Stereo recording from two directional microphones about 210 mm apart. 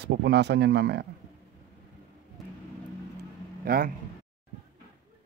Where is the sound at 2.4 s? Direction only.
Centre (ahead or behind).